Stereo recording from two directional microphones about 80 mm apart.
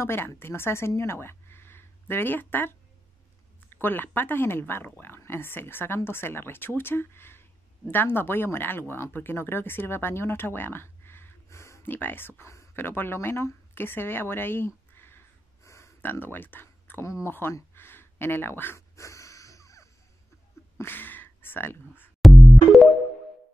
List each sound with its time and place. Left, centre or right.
0.0 s speech: left
3.7 s a woman's voice: left
11.9 s speech: left
16.0 s speech: left
17.7 s a sound: left
18.8 s snort: left
20.7 s a sound: left
22.2 s music: centre